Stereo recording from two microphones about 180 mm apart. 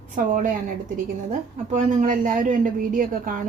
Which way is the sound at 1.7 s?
40° right (ahead or behind).